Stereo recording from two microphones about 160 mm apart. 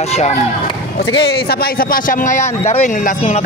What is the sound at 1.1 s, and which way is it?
Speech, 90° left.